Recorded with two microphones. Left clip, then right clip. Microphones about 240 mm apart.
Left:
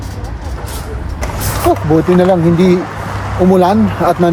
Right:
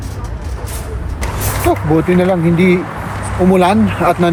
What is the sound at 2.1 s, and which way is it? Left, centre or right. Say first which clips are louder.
Speech: left 3 dB; centre.